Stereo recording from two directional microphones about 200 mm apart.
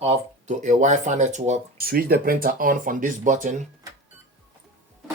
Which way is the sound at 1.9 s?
50° right (ahead or behind).